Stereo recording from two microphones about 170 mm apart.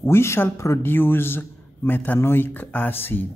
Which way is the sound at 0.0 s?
15° left (ahead or behind).